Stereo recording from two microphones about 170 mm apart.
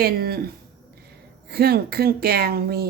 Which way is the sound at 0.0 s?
65° right (ahead or behind).